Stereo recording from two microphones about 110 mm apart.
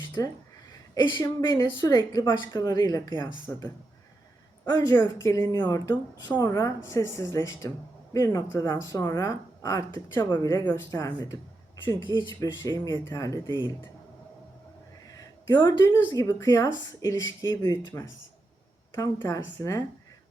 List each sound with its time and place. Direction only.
0.7 s a woman's voice: 40° left (ahead or behind)
3.5 s a woman's voice: 25° left (ahead or behind)
15.1 s a sound: 40° left (ahead or behind)
15.8 s speech: 20° left (ahead or behind)
16.1 s a woman's voice: 35° left (ahead or behind)